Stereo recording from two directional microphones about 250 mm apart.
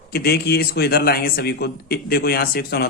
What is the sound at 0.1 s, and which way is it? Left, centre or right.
A man's voice, left.